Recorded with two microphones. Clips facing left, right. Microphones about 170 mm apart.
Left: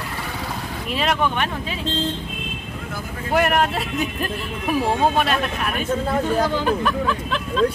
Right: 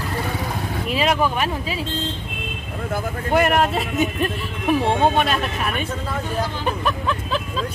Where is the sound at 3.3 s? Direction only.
Centre (ahead or behind).